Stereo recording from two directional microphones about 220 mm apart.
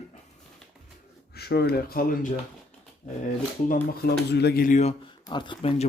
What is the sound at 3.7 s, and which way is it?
Speech, 50° left (ahead or behind).